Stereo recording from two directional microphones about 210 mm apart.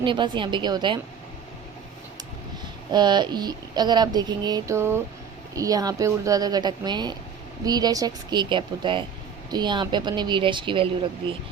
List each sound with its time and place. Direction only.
0.0 s speech: 25° right (ahead or behind)
2.9 s a woman's voice: 20° right (ahead or behind)